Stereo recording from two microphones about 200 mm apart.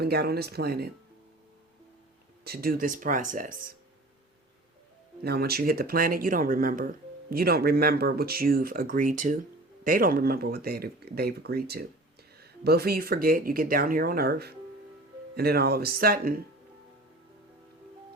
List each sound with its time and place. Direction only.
0.0 s speech: 50° right (ahead or behind)
2.4 s speech: 50° right (ahead or behind)
5.2 s speech: 50° right (ahead or behind)